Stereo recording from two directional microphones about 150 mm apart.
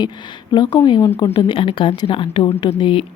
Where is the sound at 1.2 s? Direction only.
30° left (ahead or behind).